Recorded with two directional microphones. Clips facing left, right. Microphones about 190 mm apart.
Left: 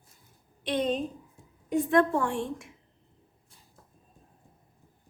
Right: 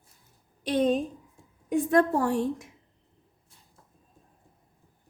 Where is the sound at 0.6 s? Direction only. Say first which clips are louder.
Right 4 dB; 45° right (ahead or behind).